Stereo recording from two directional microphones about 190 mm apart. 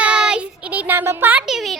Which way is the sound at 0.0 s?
5° right (ahead or behind).